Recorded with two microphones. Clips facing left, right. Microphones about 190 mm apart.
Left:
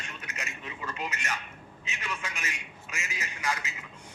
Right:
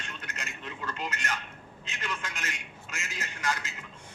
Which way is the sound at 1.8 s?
10° left (ahead or behind).